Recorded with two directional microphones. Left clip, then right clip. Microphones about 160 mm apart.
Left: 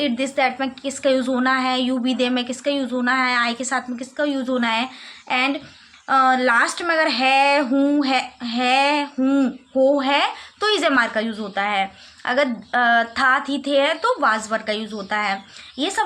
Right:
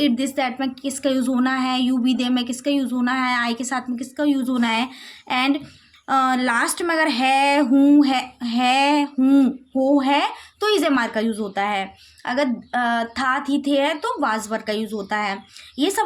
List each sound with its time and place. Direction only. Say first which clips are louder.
0.0 s speech: left 1 dB; 30° right (ahead or behind)